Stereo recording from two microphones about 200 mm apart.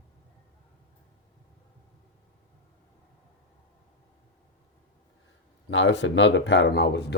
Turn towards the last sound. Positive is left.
turn(degrees=60)  # may be behind; listen again after turning